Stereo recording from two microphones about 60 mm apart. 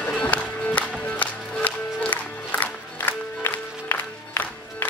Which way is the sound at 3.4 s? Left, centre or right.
Left.